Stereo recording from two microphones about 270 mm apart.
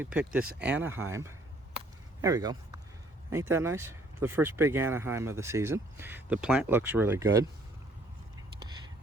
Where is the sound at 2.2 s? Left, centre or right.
Centre.